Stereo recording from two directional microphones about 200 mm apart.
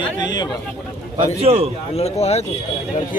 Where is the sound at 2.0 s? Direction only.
30° left (ahead or behind).